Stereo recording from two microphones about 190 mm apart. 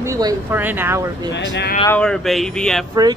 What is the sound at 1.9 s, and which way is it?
Speech, 5° left (ahead or behind).